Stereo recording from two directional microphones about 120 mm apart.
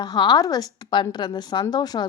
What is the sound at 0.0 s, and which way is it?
Speech, 35° left (ahead or behind).